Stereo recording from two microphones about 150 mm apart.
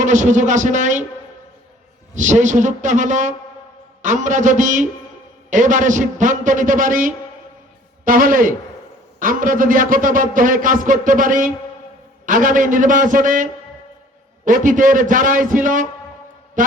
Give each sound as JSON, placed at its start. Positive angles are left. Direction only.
{"t": 0.0, "sound": "a man's voice", "side_deg": -55}
{"t": 2.1, "sound": "a man's voice", "side_deg": -55}
{"t": 16.6, "sound": "music", "side_deg": -60}